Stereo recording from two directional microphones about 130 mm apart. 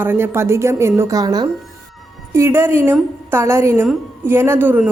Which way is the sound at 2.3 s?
20° right (ahead or behind).